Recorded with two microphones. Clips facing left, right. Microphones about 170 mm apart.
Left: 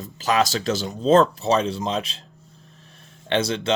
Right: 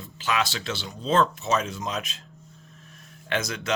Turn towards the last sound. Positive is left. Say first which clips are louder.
# left 7 dB
turn(degrees=30)  # may be behind; listen again after turning